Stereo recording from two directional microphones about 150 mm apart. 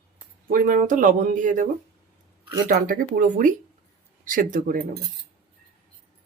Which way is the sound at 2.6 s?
80° right.